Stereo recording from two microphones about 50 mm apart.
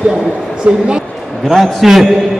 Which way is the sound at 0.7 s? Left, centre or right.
Right.